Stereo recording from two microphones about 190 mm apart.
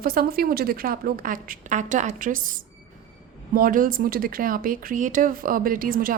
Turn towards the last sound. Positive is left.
turn(degrees=-45)  # may be behind; listen again after turning